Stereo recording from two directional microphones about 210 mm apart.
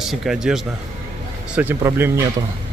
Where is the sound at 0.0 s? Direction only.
Centre (ahead or behind).